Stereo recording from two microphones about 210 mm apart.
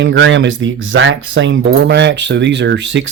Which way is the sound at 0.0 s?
60° right (ahead or behind).